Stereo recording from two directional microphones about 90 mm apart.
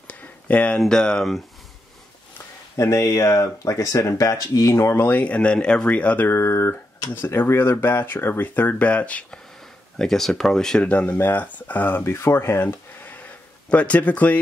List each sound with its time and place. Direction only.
0.1 s a sound: 15° left (ahead or behind)
0.8 s speech: 10° left (ahead or behind)
2.7 s speech: 35° left (ahead or behind); by 6.2 s 15° left (ahead or behind)
6.2 s speech: 25° left (ahead or behind)